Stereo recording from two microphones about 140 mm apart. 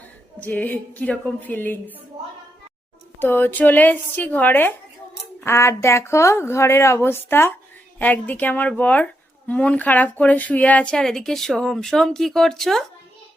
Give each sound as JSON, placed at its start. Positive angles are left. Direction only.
{"t": 0.3, "sound": "a woman's voice", "side_deg": 10}
{"t": 3.2, "sound": "a woman's voice", "side_deg": 15}